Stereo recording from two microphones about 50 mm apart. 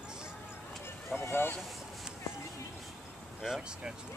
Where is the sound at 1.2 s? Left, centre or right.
Left.